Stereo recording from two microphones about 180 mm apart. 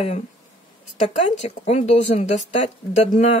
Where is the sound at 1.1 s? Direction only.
40° left (ahead or behind).